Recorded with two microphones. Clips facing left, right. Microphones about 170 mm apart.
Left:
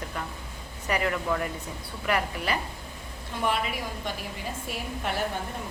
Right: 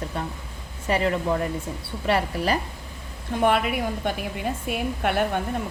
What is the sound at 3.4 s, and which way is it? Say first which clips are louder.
A woman's voice: right 7 dB; 55° right (ahead or behind).